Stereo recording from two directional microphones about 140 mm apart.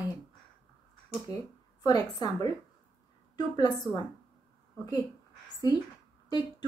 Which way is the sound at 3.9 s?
20° left (ahead or behind).